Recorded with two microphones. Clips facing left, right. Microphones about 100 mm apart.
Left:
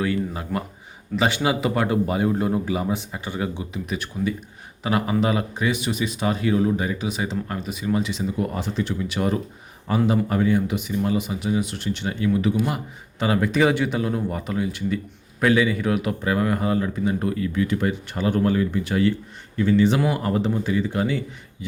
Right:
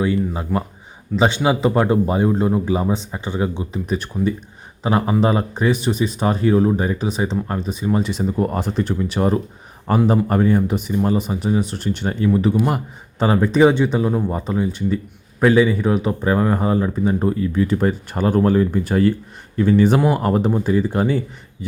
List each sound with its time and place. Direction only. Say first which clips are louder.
0.0 s speech: right 4 dB; 25° right (ahead or behind); by 21.7 s 40° right (ahead or behind)